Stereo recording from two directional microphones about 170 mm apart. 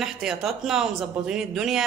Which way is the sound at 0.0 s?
Centre (ahead or behind).